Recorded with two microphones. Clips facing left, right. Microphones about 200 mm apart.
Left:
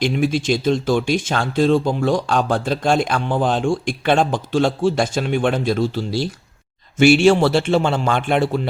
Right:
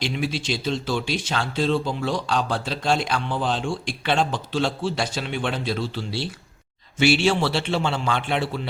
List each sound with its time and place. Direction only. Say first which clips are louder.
0.0 s speech: left 8 dB; 50° left (ahead or behind)